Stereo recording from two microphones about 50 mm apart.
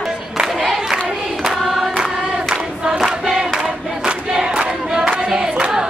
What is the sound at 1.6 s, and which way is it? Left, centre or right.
Choir, centre.